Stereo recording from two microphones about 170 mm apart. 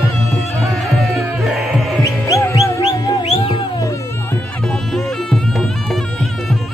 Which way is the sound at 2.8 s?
35° left (ahead or behind).